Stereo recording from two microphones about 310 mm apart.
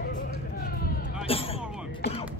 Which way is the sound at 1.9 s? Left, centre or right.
Centre.